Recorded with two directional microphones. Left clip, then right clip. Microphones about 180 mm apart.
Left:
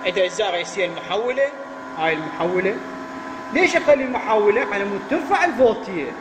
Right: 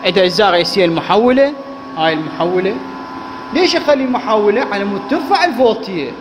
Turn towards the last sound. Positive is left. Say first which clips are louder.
# right 6 dB
turn(degrees=-5)  # may be behind; listen again after turning